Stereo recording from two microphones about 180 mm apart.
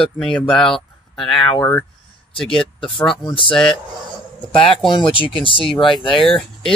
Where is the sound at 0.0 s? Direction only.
5° left (ahead or behind).